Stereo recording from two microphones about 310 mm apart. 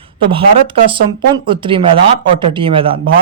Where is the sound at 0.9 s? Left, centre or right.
Centre.